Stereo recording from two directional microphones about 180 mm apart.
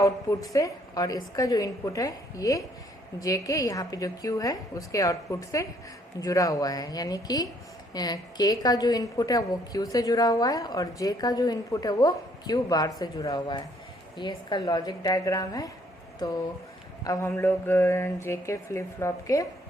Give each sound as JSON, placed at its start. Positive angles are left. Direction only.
{"t": 0.0, "sound": "a woman's voice", "side_deg": 20}
{"t": 17.0, "sound": "speech", "side_deg": 15}